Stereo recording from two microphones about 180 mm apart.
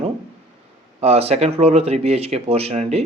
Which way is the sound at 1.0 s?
35° right (ahead or behind).